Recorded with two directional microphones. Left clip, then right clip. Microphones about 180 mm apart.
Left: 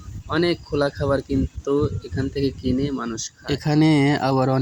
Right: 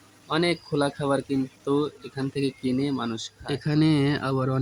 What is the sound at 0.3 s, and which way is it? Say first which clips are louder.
Speech: left 3 dB; 10° left (ahead or behind).